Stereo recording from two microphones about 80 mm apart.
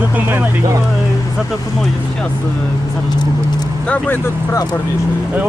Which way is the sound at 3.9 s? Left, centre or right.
Left.